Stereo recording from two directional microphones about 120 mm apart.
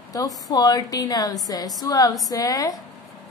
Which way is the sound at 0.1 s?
30° left (ahead or behind).